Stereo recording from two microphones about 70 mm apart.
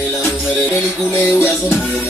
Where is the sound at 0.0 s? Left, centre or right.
Left.